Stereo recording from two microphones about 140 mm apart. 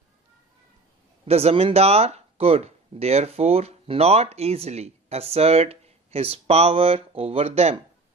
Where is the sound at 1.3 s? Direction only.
45° right (ahead or behind).